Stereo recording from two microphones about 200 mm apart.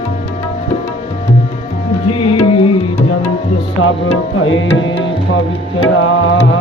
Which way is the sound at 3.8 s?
85° left.